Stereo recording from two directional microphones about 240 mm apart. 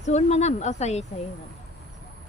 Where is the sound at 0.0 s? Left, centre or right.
Left.